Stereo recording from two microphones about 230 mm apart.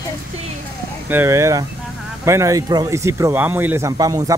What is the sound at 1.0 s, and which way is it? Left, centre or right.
Speech, centre.